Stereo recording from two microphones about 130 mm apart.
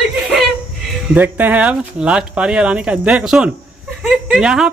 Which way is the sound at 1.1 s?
15° right (ahead or behind).